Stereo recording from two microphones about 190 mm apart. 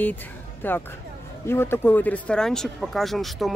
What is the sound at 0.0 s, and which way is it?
Speech, 10° left (ahead or behind).